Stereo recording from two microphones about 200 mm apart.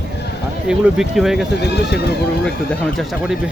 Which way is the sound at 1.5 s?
55° left (ahead or behind).